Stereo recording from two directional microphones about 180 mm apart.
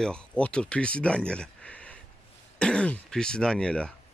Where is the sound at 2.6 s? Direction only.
5° left (ahead or behind).